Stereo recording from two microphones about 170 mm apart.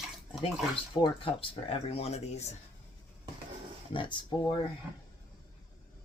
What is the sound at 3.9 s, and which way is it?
Speech, 25° left (ahead or behind).